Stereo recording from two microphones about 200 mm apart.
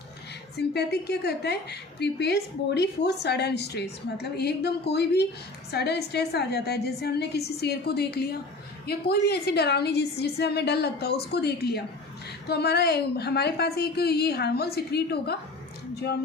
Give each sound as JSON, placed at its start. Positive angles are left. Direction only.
{"t": 0.5, "sound": "a woman's voice", "side_deg": 55}